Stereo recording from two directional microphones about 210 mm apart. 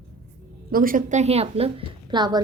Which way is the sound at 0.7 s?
40° right (ahead or behind).